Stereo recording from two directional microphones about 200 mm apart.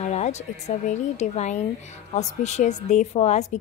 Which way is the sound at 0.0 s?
35° left (ahead or behind).